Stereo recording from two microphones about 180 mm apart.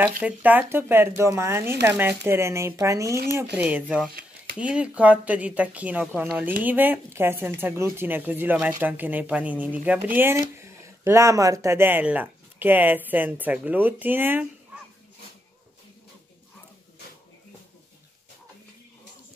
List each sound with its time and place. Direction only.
0.2 s speech: 10° right (ahead or behind)
4.1 s a sound: 50° right (ahead or behind)
4.6 s speech: 5° right (ahead or behind)